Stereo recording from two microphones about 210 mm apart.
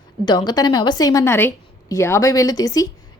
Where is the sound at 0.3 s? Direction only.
20° left (ahead or behind).